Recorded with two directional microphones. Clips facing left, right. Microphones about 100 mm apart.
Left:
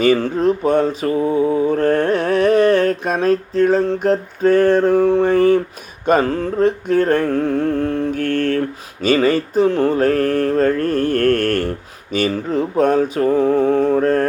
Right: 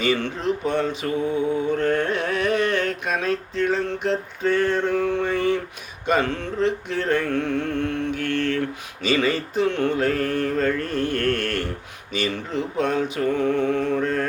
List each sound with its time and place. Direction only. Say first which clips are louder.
0.0 s mantra: left 8 dB; 45° left (ahead or behind)
6.1 s music: left 6 dB; 40° left (ahead or behind)
12.1 s mantra: left 7 dB; 45° left (ahead or behind)